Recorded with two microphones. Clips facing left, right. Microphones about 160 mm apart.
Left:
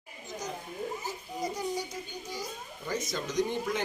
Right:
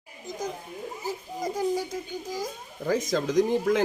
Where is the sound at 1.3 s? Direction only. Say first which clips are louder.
Right 3 dB; 90° right.